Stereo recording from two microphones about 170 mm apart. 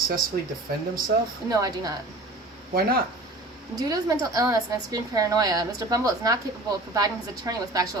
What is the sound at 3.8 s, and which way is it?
A woman's voice, 20° right (ahead or behind).